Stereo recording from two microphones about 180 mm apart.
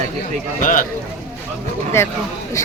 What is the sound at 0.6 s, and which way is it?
Speech, 50° left (ahead or behind).